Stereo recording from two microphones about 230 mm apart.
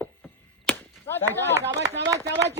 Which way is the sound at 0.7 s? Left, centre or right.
Centre.